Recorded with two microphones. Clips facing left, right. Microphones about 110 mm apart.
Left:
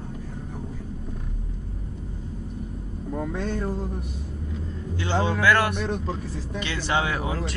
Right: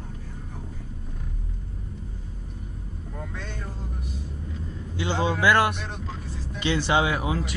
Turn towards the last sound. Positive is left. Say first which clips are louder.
# right 1 dB
turn(degrees=-10)  # may be behind; listen again after turning